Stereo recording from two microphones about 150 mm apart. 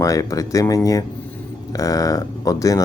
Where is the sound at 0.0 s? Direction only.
20° left (ahead or behind).